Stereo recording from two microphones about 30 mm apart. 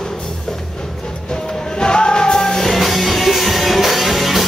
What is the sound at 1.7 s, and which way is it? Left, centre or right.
Music, left.